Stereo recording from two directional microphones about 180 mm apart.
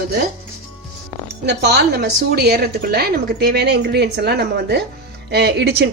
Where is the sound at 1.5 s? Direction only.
70° right (ahead or behind).